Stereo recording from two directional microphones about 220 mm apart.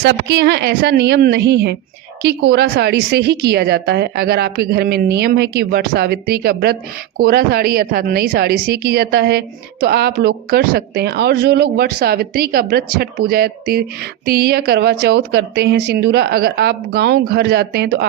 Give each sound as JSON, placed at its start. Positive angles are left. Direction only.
{"t": 0.0, "sound": "speech", "side_deg": -50}